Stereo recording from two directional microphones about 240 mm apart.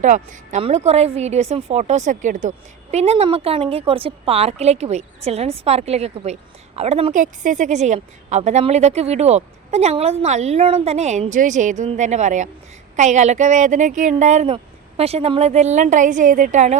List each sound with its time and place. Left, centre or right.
0.0 s a woman's voice: right